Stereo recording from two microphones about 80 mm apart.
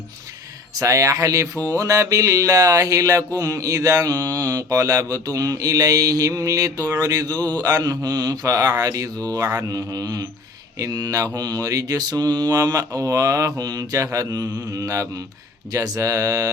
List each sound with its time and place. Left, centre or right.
0.8 s mantra: right